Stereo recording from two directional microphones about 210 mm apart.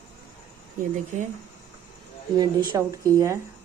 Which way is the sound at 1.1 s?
35° right (ahead or behind).